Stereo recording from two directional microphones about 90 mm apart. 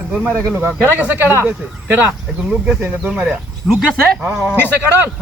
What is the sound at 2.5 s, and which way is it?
Speech, 15° right (ahead or behind).